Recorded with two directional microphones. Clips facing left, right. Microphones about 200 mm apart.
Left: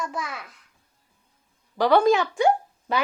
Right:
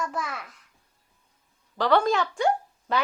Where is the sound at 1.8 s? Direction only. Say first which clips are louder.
Left 4 dB; 10° left (ahead or behind).